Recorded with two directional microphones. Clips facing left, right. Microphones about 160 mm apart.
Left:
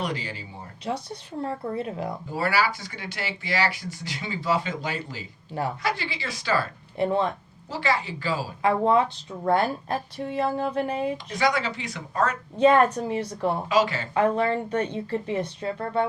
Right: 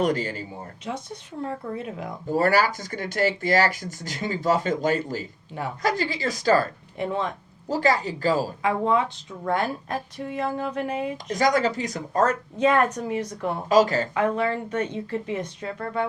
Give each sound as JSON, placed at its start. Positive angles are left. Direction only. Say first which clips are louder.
{"t": 0.0, "sound": "speech", "louder": "right 7 dB", "side_deg": -45}
{"t": 0.9, "sound": "speech", "louder": "left 3 dB", "side_deg": 35}
{"t": 2.3, "sound": "speech", "louder": "right 5 dB", "side_deg": -45}
{"t": 6.9, "sound": "speech", "louder": "left 4 dB", "side_deg": 35}
{"t": 7.7, "sound": "speech", "louder": "right 4 dB", "side_deg": -40}
{"t": 8.6, "sound": "speech", "louder": "left 4 dB", "side_deg": 35}
{"t": 11.3, "sound": "speech", "louder": "right 7 dB", "side_deg": -45}
{"t": 12.5, "sound": "speech", "louder": "left 4 dB", "side_deg": 30}
{"t": 13.7, "sound": "speech", "louder": "right 8 dB", "side_deg": -40}
{"t": 14.1, "sound": "speech", "louder": "left 1 dB", "side_deg": 35}